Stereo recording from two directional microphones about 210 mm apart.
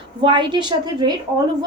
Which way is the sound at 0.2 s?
20° right (ahead or behind).